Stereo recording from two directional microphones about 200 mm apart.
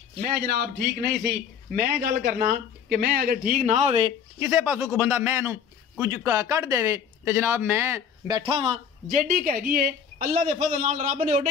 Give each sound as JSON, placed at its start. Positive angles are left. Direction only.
{"t": 0.2, "sound": "speech", "side_deg": -50}
{"t": 4.4, "sound": "a man's voice", "side_deg": -10}
{"t": 9.0, "sound": "a man's voice", "side_deg": -45}